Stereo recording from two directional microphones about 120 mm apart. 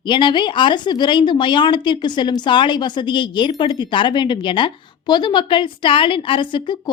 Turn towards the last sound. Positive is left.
turn(degrees=40)  # may be behind; listen again after turning